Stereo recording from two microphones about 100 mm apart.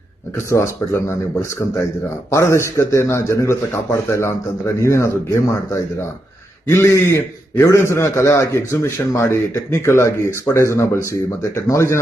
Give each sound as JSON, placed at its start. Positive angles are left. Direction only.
{"t": 0.5, "sound": "a man's voice", "side_deg": 30}